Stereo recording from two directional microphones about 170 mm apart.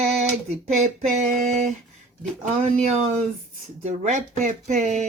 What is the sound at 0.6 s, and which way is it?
Speech, 40° right (ahead or behind).